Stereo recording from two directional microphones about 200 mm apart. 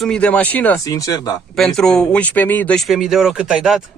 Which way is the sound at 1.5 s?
Centre (ahead or behind).